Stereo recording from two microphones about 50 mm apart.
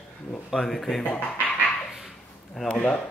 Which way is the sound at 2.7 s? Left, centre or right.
Left.